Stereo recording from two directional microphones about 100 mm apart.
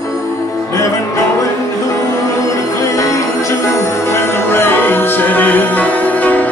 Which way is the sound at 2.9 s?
35° left (ahead or behind).